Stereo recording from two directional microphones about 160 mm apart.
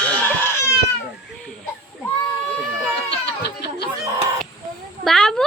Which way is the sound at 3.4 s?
90° left.